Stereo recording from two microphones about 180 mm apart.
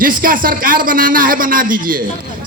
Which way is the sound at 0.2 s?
50° right (ahead or behind).